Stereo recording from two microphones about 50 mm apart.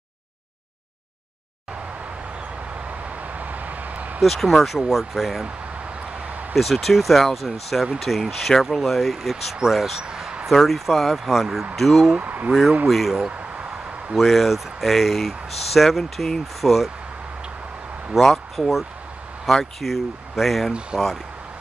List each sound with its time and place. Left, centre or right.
2.7 s vehicle: right
4.2 s speech: centre
6.1 s a sound: right
6.5 s speech: centre
10.0 s a sound: centre
10.4 s speech: centre
12.2 s speech: right
12.8 s speech: centre
14.1 s speech: centre
18.1 s speech: centre